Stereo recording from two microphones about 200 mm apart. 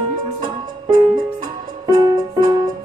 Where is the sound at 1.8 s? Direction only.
20° right (ahead or behind).